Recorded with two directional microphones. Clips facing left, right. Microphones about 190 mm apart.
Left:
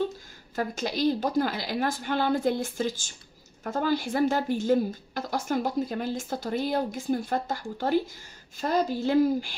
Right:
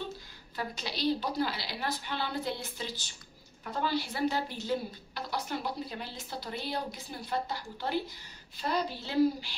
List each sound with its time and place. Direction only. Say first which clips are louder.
0.6 s speech: left 8 dB; 45° left (ahead or behind)